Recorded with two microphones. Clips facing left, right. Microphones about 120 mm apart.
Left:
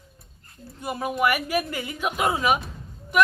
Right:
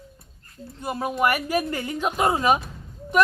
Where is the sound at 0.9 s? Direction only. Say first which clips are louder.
Right 1 dB; 5° left (ahead or behind).